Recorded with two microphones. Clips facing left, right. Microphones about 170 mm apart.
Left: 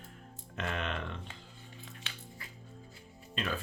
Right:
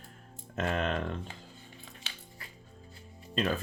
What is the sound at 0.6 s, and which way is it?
Speech, 40° right (ahead or behind).